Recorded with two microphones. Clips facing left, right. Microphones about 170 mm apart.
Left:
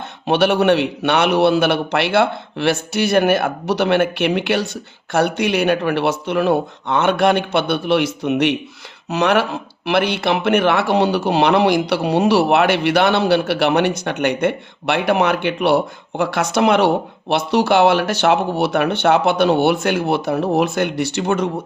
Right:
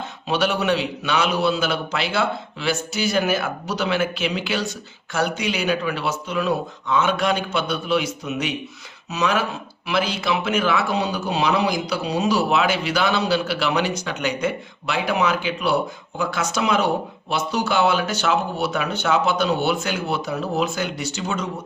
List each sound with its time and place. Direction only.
0.3 s speech: 65° left (ahead or behind)